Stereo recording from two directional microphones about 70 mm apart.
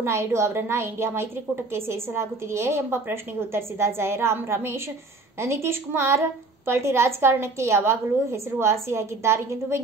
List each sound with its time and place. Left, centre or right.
0.0 s a woman's voice: right